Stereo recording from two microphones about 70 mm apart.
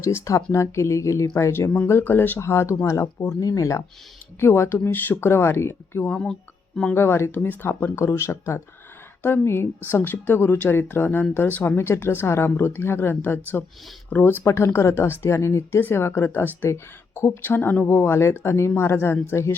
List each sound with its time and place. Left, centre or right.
0.0 s speech: left
2.4 s speech: left
4.4 s speech: left
4.8 s speech: left
7.9 s speech: left
11.8 s speech: left
14.4 s speech: left
16.6 s speech: left